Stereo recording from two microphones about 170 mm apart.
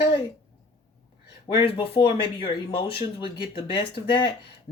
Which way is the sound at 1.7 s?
30° left (ahead or behind).